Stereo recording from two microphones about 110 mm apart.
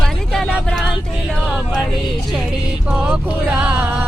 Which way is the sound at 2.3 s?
10° right (ahead or behind).